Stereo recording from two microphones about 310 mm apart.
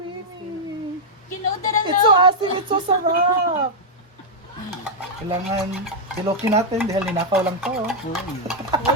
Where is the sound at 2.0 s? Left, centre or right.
Centre.